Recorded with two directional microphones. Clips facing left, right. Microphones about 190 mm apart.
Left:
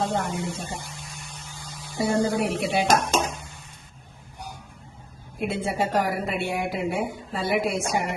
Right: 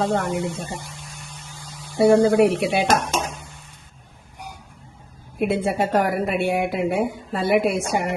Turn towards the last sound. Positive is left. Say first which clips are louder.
# right 5 dB
turn(degrees=-60)  # may be behind; listen again after turning